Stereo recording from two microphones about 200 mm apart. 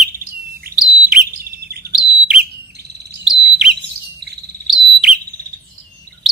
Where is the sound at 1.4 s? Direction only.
50° right (ahead or behind).